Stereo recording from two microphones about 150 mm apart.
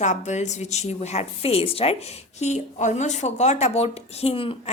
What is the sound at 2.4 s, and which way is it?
Speech, 50° left (ahead or behind).